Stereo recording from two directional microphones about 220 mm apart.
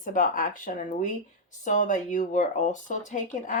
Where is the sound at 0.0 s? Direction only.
35° left (ahead or behind).